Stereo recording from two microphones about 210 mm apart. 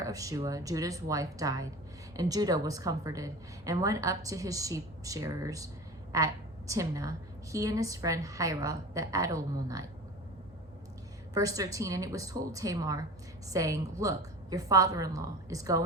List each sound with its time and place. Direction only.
0.0 s a woman's voice: 15° right (ahead or behind)
11.3 s a woman's voice: 15° right (ahead or behind)